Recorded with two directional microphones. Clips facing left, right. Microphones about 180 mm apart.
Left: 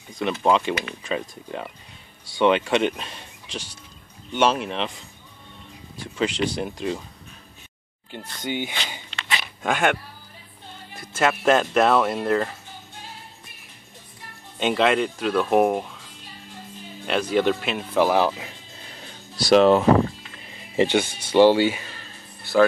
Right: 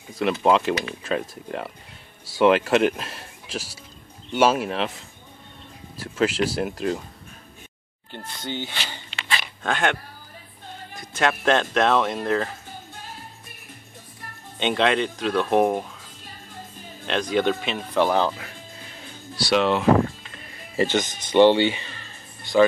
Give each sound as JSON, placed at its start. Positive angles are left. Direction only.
{"t": 0.1, "sound": "speech", "side_deg": -5}
{"t": 5.9, "sound": "speech", "side_deg": -5}
{"t": 8.1, "sound": "speech", "side_deg": 15}
{"t": 11.0, "sound": "speech", "side_deg": 5}
{"t": 14.6, "sound": "speech", "side_deg": 5}
{"t": 17.0, "sound": "speech", "side_deg": 5}
{"t": 19.4, "sound": "speech", "side_deg": 40}
{"t": 20.7, "sound": "speech", "side_deg": 15}